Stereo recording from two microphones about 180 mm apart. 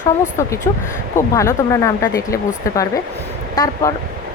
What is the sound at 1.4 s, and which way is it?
A woman's voice, 15° left (ahead or behind).